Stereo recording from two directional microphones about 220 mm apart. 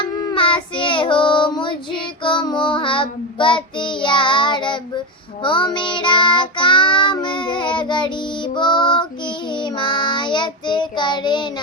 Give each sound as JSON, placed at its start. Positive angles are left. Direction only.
{"t": 0.0, "sound": "child singing", "side_deg": 20}